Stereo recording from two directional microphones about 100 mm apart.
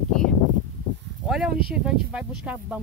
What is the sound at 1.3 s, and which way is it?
Speech, 5° right (ahead or behind).